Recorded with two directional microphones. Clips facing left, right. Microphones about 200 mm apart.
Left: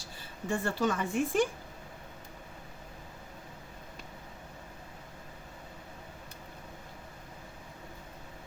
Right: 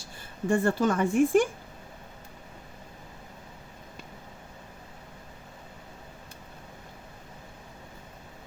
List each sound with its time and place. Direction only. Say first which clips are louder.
0.4 s speech: right 6 dB; 50° right (ahead or behind)